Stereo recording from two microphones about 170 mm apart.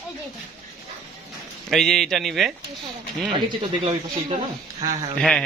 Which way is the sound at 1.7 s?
Centre (ahead or behind).